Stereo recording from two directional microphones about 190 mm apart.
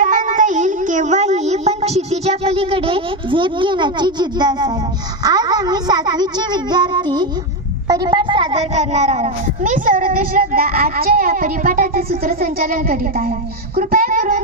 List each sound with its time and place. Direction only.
0.0 s child singing: 40° right (ahead or behind); by 4.7 s 20° right (ahead or behind)
5.2 s a child's voice: 20° right (ahead or behind); by 14.4 s 45° right (ahead or behind)